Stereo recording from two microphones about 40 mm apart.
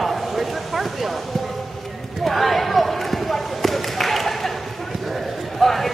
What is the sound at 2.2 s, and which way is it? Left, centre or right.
Basketball bounce, centre.